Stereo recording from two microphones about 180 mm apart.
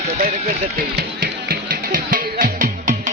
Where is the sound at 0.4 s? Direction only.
50° right (ahead or behind).